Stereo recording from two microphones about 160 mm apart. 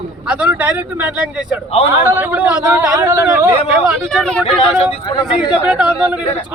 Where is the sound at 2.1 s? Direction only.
10° right (ahead or behind).